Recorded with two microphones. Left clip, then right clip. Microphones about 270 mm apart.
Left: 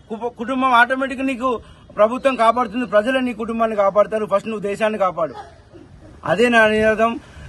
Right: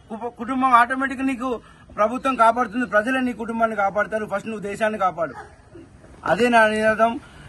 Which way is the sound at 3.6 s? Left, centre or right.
Left.